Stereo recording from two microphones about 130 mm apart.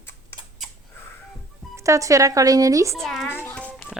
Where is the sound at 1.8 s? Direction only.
25° right (ahead or behind).